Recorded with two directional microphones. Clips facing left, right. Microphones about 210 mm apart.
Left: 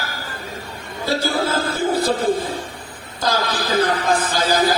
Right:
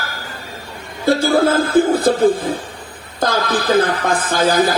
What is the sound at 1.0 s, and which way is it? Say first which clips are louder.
A man's voice: right 7 dB; 50° right (ahead or behind).